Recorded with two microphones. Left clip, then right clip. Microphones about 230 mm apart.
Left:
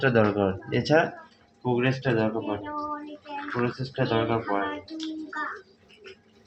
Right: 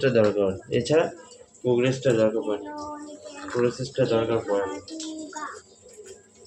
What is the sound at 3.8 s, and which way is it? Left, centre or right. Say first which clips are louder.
Speech: right 3 dB; left.